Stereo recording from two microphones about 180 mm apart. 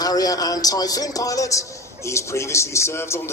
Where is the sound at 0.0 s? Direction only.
20° left (ahead or behind).